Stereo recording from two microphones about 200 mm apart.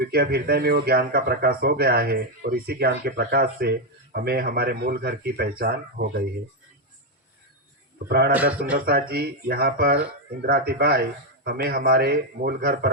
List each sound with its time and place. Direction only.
0.0 s speech: 50° right (ahead or behind)
8.3 s speech: 5° right (ahead or behind)
8.8 s speech: 50° right (ahead or behind)